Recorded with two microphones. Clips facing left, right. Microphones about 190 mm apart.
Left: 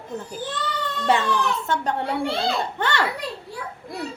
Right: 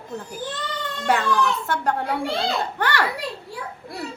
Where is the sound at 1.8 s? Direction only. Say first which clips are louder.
Even; 20° left (ahead or behind).